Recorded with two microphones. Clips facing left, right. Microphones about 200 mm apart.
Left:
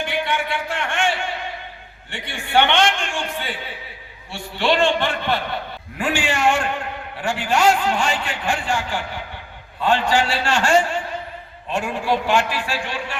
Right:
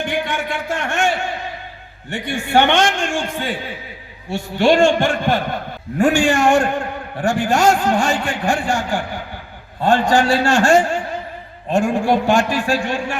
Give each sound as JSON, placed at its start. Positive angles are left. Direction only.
{"t": 0.0, "sound": "a man's voice", "side_deg": -45}